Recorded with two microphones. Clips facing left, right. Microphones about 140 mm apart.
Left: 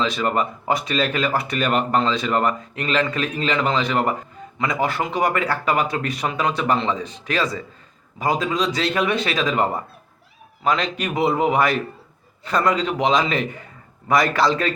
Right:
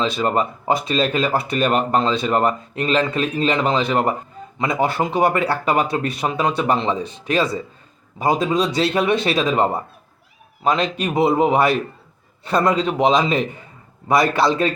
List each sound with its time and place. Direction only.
0.0 s speech: 25° right (ahead or behind)